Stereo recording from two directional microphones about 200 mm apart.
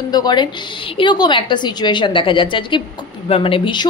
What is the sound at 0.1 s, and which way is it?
A woman's voice, 20° left (ahead or behind).